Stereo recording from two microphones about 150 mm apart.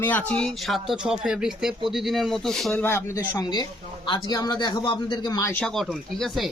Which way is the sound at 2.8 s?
15° left (ahead or behind).